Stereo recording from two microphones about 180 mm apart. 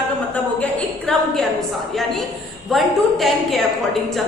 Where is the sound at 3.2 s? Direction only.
Centre (ahead or behind).